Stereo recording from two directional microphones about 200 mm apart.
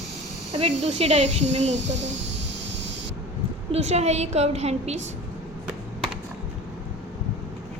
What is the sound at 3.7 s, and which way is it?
A woman's voice, 30° right (ahead or behind).